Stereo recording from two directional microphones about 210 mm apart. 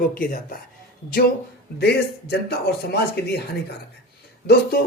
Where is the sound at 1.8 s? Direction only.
50° left (ahead or behind).